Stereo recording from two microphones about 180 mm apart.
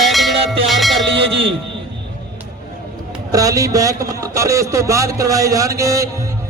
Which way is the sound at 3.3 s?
20° right (ahead or behind).